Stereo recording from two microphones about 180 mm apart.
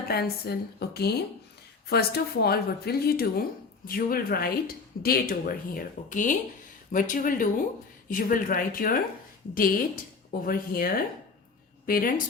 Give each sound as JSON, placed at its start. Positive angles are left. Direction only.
{"t": 0.1, "sound": "a woman's voice", "side_deg": 60}